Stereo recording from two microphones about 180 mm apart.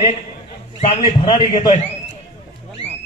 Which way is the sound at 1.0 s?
25° left (ahead or behind).